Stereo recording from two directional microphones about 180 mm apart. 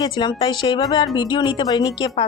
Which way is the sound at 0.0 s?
25° left (ahead or behind).